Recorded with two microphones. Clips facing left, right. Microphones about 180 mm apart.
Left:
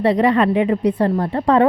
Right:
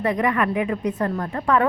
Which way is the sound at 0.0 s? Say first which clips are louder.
Left 6 dB; 30° left (ahead or behind).